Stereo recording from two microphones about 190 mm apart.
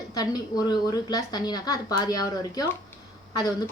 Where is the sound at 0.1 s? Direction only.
20° left (ahead or behind).